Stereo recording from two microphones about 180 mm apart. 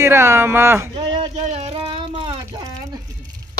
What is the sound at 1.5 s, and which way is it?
Child singing, 35° right (ahead or behind).